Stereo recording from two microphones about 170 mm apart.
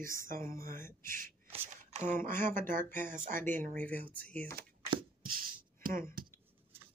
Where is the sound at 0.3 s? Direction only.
55° right (ahead or behind).